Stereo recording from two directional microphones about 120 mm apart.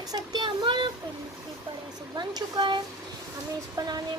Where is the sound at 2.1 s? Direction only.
35° right (ahead or behind).